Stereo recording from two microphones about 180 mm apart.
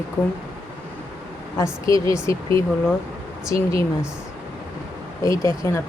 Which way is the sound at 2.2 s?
15° left (ahead or behind).